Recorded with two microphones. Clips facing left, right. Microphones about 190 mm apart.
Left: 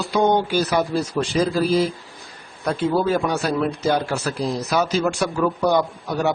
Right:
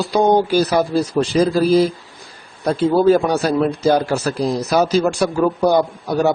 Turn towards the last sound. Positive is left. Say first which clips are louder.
# right 5 dB
turn(degrees=-35)  # may be behind; listen again after turning